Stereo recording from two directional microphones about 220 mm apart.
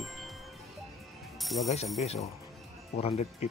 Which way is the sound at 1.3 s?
Centre (ahead or behind).